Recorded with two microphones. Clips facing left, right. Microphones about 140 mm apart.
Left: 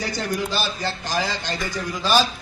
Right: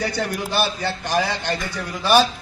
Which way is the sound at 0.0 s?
60° right (ahead or behind).